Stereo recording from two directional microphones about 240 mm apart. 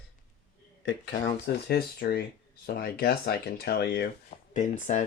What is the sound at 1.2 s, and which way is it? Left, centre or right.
Speech, left.